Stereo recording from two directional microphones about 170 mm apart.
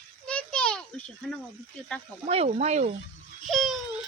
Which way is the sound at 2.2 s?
35° right (ahead or behind).